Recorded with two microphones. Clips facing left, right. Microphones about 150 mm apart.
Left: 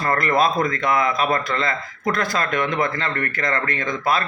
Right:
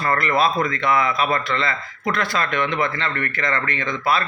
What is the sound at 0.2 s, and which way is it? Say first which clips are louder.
A man's voice: left 1 dB; 45° left (ahead or behind).